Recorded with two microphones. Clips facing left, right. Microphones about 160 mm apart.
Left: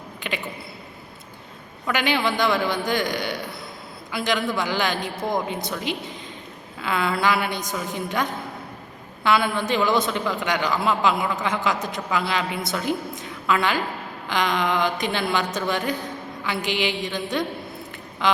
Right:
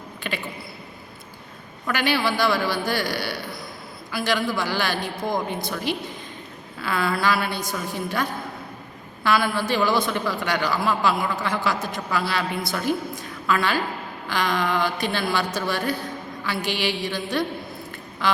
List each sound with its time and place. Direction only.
0.2 s a woman's voice: 15° left (ahead or behind)
1.9 s a man's voice: 20° left (ahead or behind)
18.2 s a sound: 20° left (ahead or behind)